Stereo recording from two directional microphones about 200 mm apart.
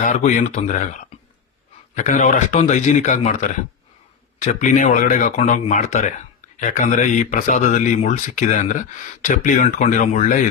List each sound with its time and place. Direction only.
0.0 s speech: 35° left (ahead or behind)
2.0 s speech: 35° left (ahead or behind)
4.4 s speech: 35° left (ahead or behind)